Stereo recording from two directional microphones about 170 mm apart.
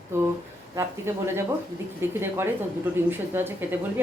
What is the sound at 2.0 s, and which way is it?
Speech, 15° right (ahead or behind).